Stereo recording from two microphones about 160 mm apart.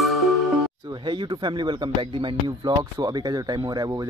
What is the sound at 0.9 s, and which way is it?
Speech, 30° right (ahead or behind).